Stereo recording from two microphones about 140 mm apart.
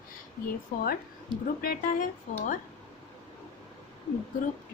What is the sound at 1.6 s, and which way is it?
Speech, 75° left (ahead or behind).